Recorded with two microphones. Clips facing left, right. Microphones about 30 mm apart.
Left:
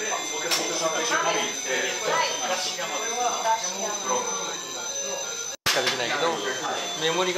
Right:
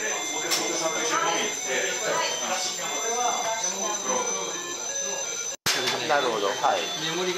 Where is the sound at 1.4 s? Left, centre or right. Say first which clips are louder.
Left 1 dB; left.